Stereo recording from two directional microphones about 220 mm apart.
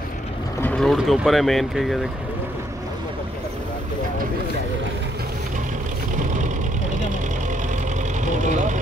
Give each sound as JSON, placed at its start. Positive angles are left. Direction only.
{"t": 0.6, "sound": "speech", "side_deg": 5}
{"t": 8.3, "sound": "speech", "side_deg": -35}